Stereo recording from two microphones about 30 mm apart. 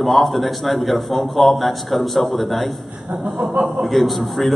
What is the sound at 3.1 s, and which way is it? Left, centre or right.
Speech, right.